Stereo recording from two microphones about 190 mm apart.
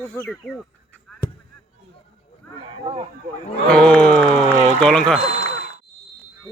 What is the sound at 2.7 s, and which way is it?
Speech, 25° right (ahead or behind).